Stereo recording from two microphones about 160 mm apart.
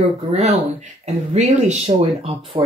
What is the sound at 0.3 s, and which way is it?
Speech, 45° right (ahead or behind).